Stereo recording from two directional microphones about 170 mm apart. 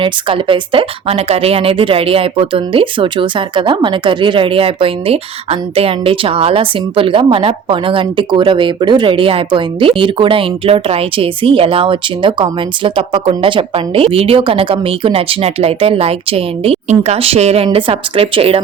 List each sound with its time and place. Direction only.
0.0 s speech: 30° right (ahead or behind)